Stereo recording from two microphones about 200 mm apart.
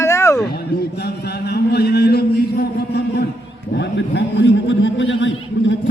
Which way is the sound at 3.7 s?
60° left (ahead or behind).